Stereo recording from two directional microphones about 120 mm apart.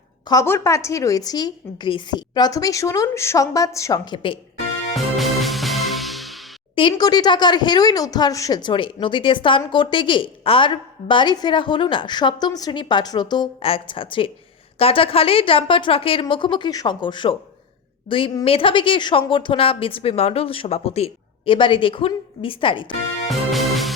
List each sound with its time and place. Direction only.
0.4 s a woman's voice: 20° left (ahead or behind)
4.0 s speech: 45° left (ahead or behind)
4.9 s music: centre (ahead or behind)
6.7 s speech: 40° left (ahead or behind)
13.7 s a woman's voice: 50° left (ahead or behind)
23.3 s music: centre (ahead or behind)